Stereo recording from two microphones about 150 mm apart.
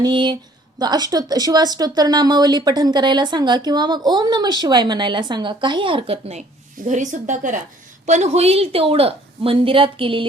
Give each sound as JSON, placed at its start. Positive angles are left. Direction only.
{"t": 0.0, "sound": "a woman's voice", "side_deg": -30}
{"t": 6.8, "sound": "a woman's voice", "side_deg": -55}